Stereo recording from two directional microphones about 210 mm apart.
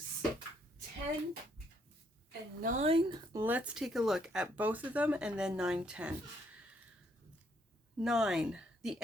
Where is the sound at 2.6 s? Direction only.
35° right (ahead or behind).